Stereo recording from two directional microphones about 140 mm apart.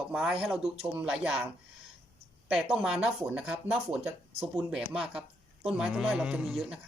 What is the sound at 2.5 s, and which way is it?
Speech, 5° right (ahead or behind).